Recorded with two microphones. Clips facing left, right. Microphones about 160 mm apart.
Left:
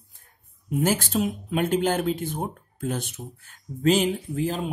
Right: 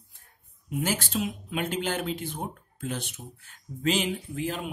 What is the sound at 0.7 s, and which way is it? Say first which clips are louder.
Speech: left 6 dB; 45° left (ahead or behind).